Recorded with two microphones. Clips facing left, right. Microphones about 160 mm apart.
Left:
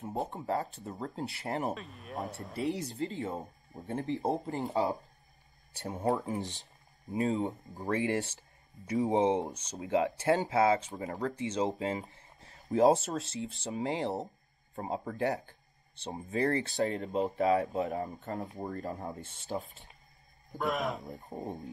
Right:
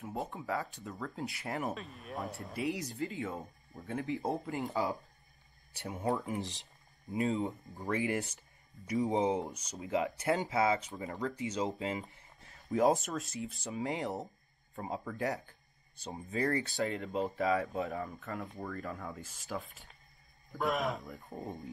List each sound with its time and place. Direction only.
0.3 s speech: 40° left (ahead or behind)
1.7 s speech: centre (ahead or behind)
2.7 s speech: 30° left (ahead or behind)
11.3 s speech: 30° left (ahead or behind)
20.5 s speech: centre (ahead or behind)
21.0 s speech: 40° left (ahead or behind)
21.3 s speech: 25° left (ahead or behind)